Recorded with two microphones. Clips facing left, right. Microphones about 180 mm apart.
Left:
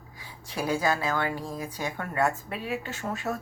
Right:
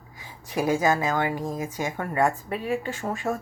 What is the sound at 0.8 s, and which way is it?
Speech, 15° right (ahead or behind).